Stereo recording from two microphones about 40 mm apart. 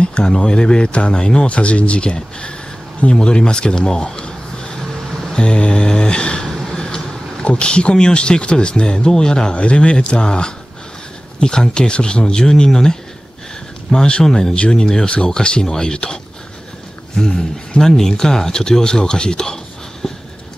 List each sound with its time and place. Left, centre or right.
0.0 s speech: left
5.3 s mantra: left
6.7 s a sound: centre
7.4 s speech: left